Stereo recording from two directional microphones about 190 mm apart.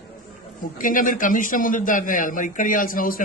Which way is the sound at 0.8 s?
45° left (ahead or behind).